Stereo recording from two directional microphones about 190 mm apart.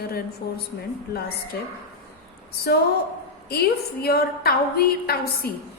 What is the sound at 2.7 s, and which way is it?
A woman's voice, 60° left (ahead or behind).